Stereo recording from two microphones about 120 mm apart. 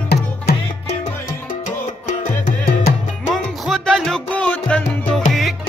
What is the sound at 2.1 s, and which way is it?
Music, 90° left.